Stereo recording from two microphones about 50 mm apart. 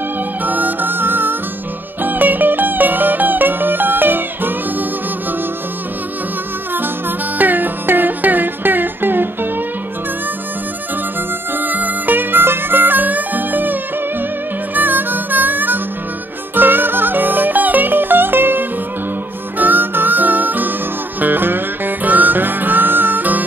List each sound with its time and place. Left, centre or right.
0.4 s music: right
6.7 s music: right
11.5 s music: right
14.7 s harmonica: right
16.5 s music: right